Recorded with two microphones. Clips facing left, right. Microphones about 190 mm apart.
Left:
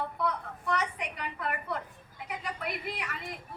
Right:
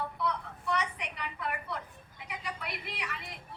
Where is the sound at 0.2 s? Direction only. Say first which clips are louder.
Left 2 dB; 45° left (ahead or behind).